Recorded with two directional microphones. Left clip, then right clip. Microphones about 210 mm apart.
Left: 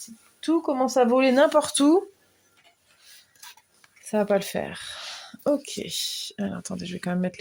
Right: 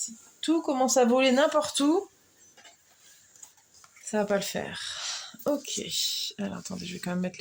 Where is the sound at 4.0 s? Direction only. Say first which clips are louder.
Left 4 dB; 40° left (ahead or behind).